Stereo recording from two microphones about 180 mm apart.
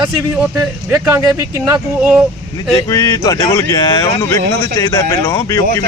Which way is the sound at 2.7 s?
20° left (ahead or behind).